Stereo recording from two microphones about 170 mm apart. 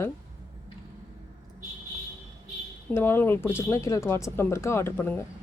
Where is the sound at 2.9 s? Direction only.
15° left (ahead or behind).